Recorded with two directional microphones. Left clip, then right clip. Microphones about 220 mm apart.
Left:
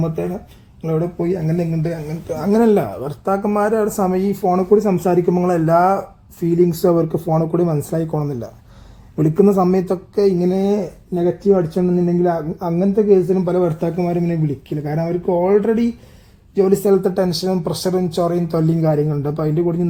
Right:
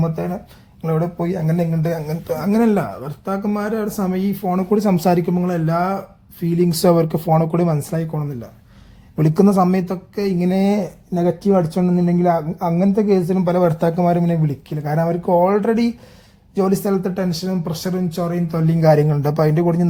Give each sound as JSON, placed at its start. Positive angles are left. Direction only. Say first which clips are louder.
{"t": 0.9, "sound": "speech", "louder": "left 2 dB", "side_deg": -15}
{"t": 4.7, "sound": "speech", "louder": "even", "side_deg": -25}
{"t": 5.2, "sound": "speech", "louder": "left 5 dB", "side_deg": -15}
{"t": 9.1, "sound": "speech", "louder": "left 1 dB", "side_deg": -20}
{"t": 9.6, "sound": "speech", "louder": "left 4 dB", "side_deg": -5}
{"t": 10.5, "sound": "speech", "louder": "left 1 dB", "side_deg": -25}
{"t": 18.9, "sound": "speech", "louder": "right 4 dB", "side_deg": -35}